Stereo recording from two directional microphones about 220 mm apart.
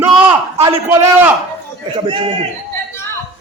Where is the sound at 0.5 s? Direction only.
25° right (ahead or behind).